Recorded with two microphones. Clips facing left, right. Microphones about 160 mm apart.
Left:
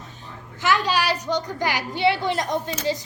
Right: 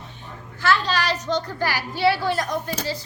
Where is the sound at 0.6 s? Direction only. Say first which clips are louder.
Even; 15° left (ahead or behind).